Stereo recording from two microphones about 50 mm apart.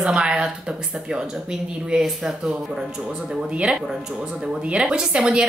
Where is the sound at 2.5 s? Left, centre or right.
Centre.